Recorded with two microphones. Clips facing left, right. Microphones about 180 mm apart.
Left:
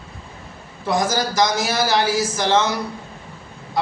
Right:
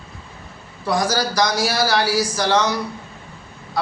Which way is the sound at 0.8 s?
20° left (ahead or behind).